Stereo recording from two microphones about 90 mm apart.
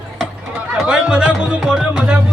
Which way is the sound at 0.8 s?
5° right (ahead or behind).